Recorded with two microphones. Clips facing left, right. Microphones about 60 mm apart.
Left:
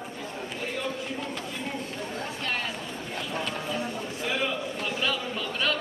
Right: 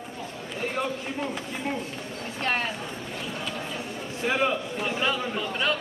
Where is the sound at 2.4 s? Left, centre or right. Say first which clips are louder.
Right 6 dB; right.